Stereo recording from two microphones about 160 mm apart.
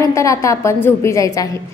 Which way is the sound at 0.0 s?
20° left (ahead or behind).